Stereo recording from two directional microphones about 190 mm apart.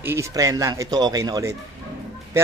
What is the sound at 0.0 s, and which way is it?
A man's voice, 15° right (ahead or behind).